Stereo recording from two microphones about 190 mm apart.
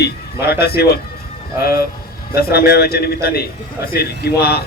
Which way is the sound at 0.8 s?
55° left (ahead or behind).